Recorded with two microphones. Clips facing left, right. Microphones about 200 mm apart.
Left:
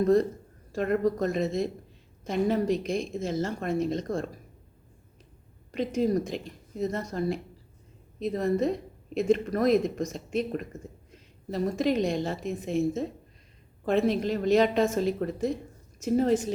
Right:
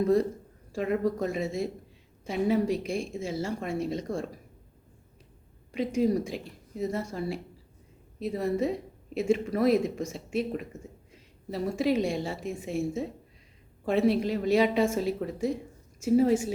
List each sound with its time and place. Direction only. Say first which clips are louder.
0.0 s a woman's voice: left 2 dB; 10° right (ahead or behind)
5.7 s a woman's voice: even; 10° right (ahead or behind)